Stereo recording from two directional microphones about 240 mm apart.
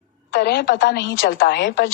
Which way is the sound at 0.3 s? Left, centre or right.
Left.